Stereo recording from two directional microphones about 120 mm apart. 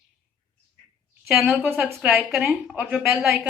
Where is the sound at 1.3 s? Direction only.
5° right (ahead or behind).